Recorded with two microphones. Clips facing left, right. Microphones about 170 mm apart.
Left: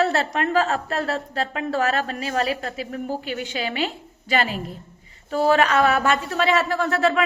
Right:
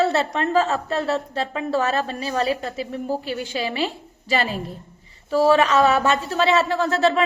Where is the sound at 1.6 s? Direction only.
30° right (ahead or behind).